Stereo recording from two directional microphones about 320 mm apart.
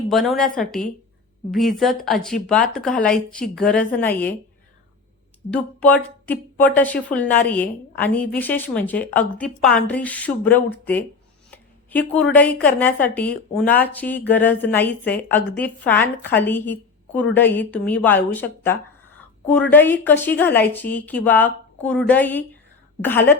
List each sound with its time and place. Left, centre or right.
0.1 s a woman's voice: centre
5.5 s a woman's voice: centre
11.5 s a sound: centre
12.6 s a woman's voice: centre